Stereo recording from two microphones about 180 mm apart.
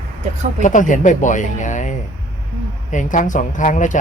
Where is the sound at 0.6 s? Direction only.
45° left (ahead or behind).